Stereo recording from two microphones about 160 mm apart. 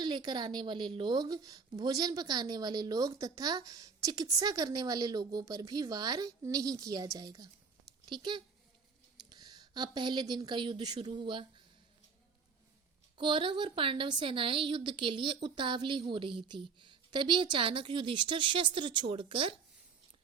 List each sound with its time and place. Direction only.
0.0 s a woman's voice: 30° right (ahead or behind)
13.1 s a woman's voice: 30° right (ahead or behind)